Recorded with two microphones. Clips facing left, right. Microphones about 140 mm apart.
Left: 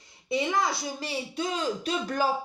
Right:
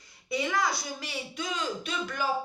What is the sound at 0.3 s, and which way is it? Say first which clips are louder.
Speech: left 2 dB; 25° left (ahead or behind).